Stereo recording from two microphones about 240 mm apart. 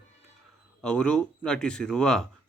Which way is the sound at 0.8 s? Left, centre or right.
Centre.